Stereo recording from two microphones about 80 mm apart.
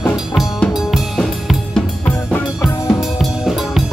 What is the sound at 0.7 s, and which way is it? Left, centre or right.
Drum kit, centre.